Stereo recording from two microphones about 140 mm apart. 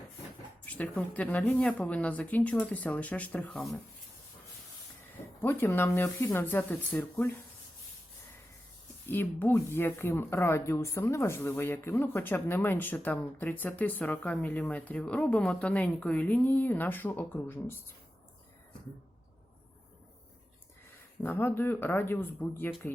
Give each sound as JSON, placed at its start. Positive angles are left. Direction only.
{"t": 0.6, "sound": "speech", "side_deg": 10}
{"t": 5.4, "sound": "speech", "side_deg": 15}
{"t": 9.0, "sound": "speech", "side_deg": 15}
{"t": 21.2, "sound": "speech", "side_deg": 15}